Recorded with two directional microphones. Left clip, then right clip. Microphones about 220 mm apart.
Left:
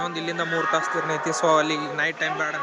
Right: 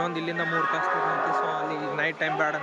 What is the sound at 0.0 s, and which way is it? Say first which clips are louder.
Speech: left 1 dB; 10° right (ahead or behind).